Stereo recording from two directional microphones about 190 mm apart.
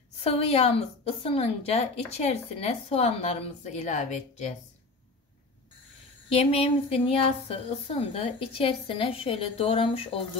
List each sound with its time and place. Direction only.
0.2 s a woman's voice: 30° left (ahead or behind)
6.2 s a woman's voice: 30° left (ahead or behind)